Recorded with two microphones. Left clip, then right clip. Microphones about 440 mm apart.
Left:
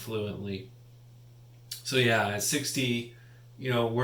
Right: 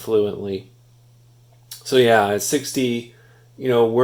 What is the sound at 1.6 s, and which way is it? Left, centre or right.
Speech, centre.